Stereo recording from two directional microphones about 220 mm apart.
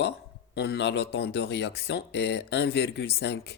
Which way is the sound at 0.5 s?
50° left (ahead or behind).